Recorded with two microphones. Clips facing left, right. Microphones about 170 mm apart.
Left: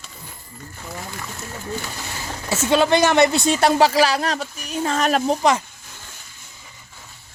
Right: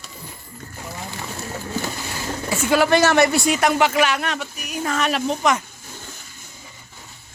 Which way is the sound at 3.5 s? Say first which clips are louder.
Left 2 dB; 30° left (ahead or behind).